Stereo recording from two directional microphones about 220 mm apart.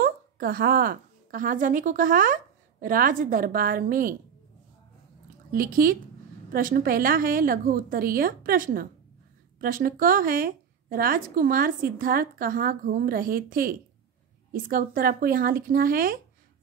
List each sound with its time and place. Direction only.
0.0 s a woman's voice: 40° right (ahead or behind)
5.5 s a woman's voice: 40° right (ahead or behind)